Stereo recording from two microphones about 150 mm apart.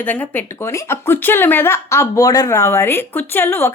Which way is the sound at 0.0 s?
10° left (ahead or behind).